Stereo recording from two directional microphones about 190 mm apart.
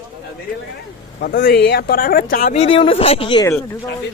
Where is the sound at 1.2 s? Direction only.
50° left (ahead or behind); by 3.5 s 25° left (ahead or behind).